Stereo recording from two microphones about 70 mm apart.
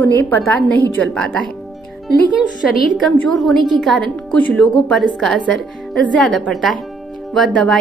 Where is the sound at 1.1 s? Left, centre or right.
Centre.